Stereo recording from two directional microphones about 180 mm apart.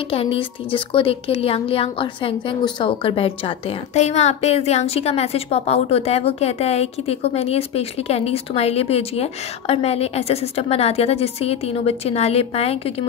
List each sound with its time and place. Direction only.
0.1 s speech: 30° left (ahead or behind)